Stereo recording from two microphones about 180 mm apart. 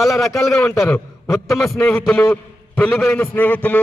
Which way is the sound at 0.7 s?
10° left (ahead or behind).